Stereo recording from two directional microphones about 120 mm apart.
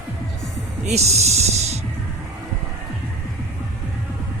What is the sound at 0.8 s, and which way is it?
Speech, 65° right (ahead or behind).